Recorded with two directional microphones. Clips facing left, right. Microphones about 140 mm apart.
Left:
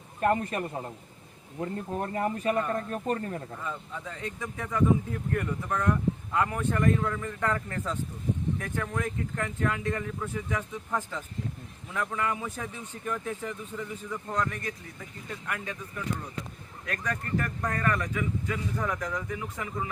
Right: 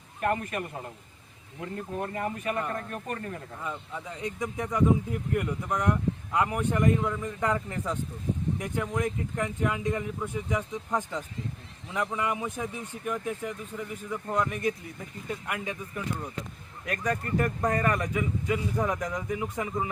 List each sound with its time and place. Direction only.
0.2 s speech: 30° left (ahead or behind)
2.1 s speech: 35° left (ahead or behind)
3.6 s speech: 15° right (ahead or behind)